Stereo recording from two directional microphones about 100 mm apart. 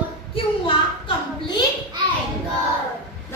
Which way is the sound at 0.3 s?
55° left (ahead or behind).